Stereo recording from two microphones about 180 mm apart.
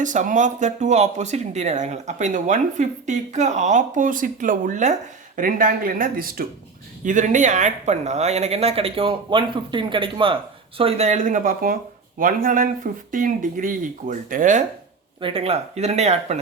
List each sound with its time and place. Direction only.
0.0 s speech: 45° right (ahead or behind)
15.2 s speech: 30° right (ahead or behind)